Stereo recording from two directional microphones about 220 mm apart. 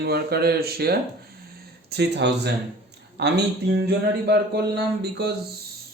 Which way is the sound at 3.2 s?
50° right (ahead or behind).